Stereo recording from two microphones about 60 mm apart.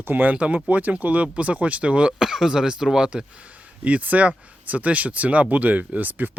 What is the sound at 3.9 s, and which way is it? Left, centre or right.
Speech, right.